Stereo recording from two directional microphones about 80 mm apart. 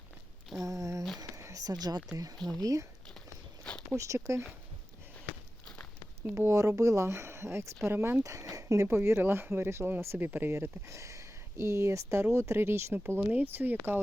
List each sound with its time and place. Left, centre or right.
0.6 s a sound: right
1.6 s speech: right
3.6 s a sound: centre
3.9 s speech: right
5.6 s a sound: centre
6.3 s speech: right
6.6 s speech: right
8.2 s speech: right
9.0 s speech: right